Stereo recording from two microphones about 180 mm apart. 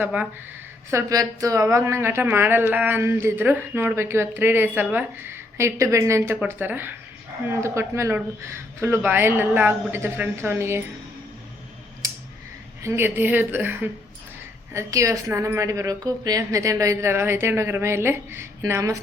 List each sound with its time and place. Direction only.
0.0 s speech: 10° right (ahead or behind)
12.8 s speech: 15° right (ahead or behind)